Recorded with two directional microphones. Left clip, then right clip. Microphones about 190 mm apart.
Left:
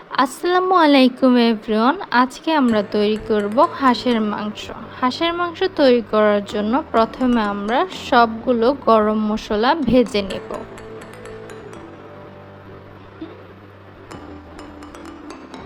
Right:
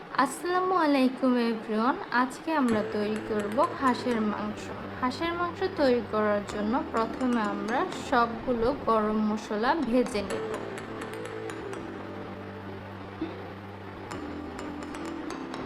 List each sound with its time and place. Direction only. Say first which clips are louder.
0.1 s speech: left 9 dB; 35° left (ahead or behind)